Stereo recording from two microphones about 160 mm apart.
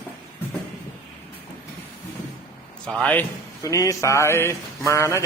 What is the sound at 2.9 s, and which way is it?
Speech, 5° left (ahead or behind).